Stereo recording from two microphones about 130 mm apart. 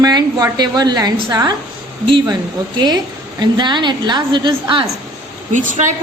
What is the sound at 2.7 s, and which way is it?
A woman's voice, 35° right (ahead or behind).